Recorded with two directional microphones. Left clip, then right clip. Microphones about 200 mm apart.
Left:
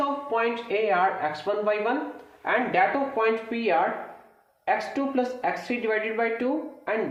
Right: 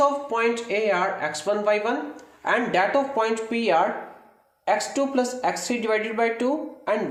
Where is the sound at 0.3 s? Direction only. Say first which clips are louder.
Right 2 dB; 40° right (ahead or behind).